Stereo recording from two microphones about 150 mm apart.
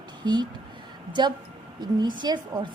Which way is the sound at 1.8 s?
30° right (ahead or behind).